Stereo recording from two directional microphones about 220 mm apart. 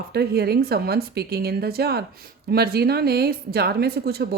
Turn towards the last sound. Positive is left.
turn(degrees=-45)  # may be behind; listen again after turning